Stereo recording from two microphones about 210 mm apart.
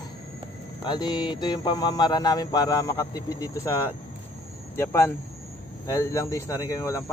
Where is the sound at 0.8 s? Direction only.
20° left (ahead or behind).